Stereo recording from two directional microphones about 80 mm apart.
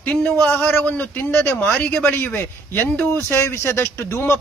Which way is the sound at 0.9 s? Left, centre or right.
Left.